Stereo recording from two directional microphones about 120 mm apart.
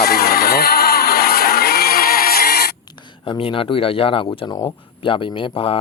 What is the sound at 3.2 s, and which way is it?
Speech, 50° left (ahead or behind).